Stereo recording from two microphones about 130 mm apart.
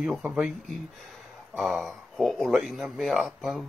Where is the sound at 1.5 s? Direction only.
Centre (ahead or behind).